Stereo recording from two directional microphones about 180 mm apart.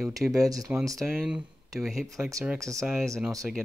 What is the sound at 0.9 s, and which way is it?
Speech, 5° right (ahead or behind).